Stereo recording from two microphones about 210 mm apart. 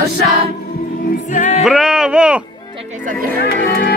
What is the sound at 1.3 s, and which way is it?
Music, 35° left (ahead or behind).